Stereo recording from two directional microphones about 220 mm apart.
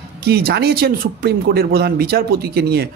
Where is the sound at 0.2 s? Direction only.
45° right (ahead or behind).